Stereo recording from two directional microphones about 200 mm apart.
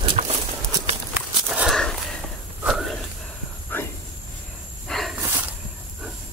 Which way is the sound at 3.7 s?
10° left (ahead or behind).